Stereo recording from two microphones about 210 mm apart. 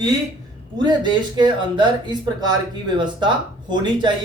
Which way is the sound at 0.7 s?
20° right (ahead or behind).